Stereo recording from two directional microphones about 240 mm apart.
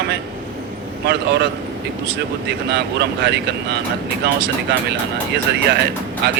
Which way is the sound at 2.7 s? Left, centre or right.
Right.